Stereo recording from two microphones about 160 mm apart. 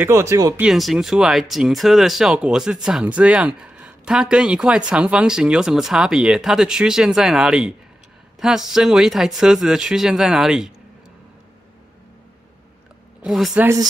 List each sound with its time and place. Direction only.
0.0 s speech: 15° right (ahead or behind)
0.6 s speech: centre (ahead or behind)
13.2 s a woman's voice: centre (ahead or behind)
13.6 s speech: 20° right (ahead or behind)